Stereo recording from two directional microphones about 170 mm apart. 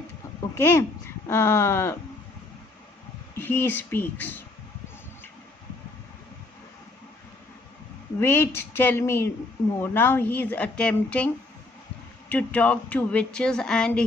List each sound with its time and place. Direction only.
0.4 s speech: 15° left (ahead or behind)
3.3 s a woman's voice: 10° left (ahead or behind)
8.2 s a woman's voice: 15° left (ahead or behind)
12.3 s a woman's voice: 10° left (ahead or behind)